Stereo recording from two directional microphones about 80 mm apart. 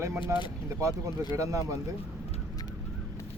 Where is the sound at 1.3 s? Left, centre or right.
Right.